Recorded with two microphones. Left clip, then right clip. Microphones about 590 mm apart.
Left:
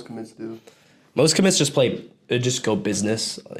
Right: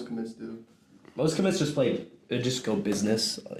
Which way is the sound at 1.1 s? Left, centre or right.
Left.